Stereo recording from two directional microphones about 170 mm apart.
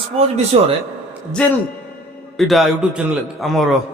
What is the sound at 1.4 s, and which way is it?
A man's voice, 5° left (ahead or behind).